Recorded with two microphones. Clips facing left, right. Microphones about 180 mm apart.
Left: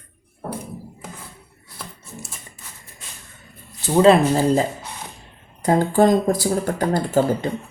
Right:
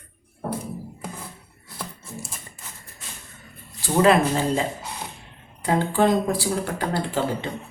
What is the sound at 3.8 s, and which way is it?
Speech, 25° left (ahead or behind).